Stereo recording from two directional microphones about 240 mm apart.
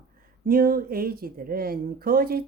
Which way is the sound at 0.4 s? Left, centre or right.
Right.